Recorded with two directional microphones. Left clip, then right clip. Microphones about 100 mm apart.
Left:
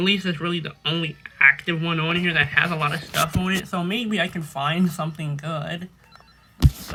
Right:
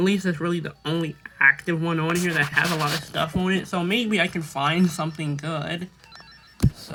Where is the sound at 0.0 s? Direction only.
20° right (ahead or behind).